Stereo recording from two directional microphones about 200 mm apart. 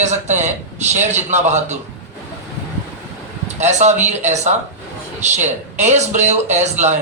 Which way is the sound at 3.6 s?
35° right (ahead or behind).